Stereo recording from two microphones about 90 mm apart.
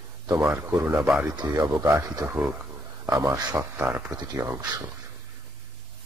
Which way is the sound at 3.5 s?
20° right (ahead or behind).